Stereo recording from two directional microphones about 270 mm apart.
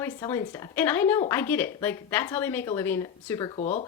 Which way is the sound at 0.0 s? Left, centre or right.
Centre.